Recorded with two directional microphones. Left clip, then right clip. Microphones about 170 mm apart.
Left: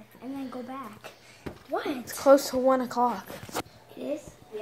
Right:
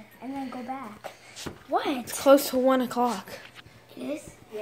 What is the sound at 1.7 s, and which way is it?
Speech, 50° right (ahead or behind).